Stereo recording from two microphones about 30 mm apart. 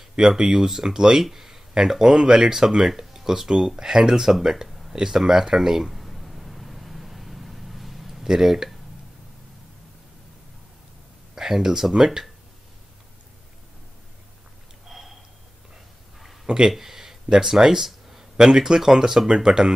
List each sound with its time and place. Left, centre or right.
0.2 s speech: right
0.5 s speech: centre
4.1 s speech: centre
4.6 s a sound: centre
4.9 s speech: centre
5.9 s vehicle: centre
8.3 s speech: centre
11.3 s speech: centre
14.9 s a sound: centre
16.4 s a sound: centre
17.3 s speech: centre